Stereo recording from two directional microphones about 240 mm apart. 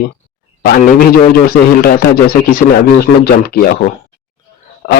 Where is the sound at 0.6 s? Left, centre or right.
Left.